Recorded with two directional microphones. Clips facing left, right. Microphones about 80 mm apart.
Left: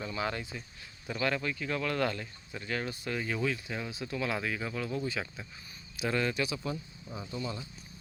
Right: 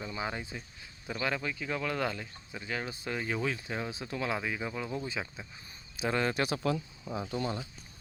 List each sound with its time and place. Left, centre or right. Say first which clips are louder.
0.1 s speech: left 2 dB; centre
6.3 s speech: right 2 dB; right
6.6 s speech: right 5 dB; right